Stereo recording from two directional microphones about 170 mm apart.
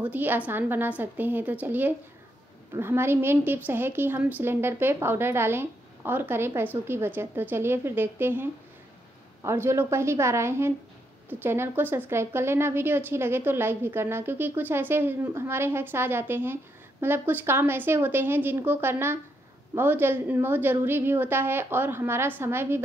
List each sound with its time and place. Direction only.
0.0 s a woman's voice: 10° right (ahead or behind)